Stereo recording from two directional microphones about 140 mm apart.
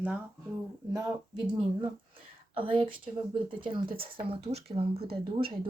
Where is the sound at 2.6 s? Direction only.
40° right (ahead or behind).